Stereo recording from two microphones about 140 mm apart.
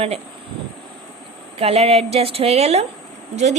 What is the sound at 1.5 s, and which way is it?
A woman's voice, 45° right (ahead or behind).